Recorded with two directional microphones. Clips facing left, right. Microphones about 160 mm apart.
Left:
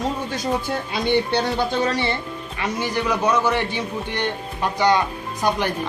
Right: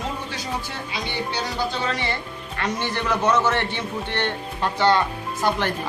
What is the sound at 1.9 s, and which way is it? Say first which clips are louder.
Speech: left 4 dB; 35° left (ahead or behind).